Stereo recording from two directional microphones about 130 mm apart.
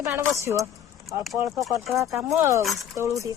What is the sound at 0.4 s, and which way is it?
Speech, 25° right (ahead or behind).